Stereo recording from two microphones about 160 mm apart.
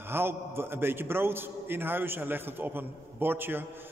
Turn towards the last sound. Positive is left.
turn(degrees=-15)  # may be behind; listen again after turning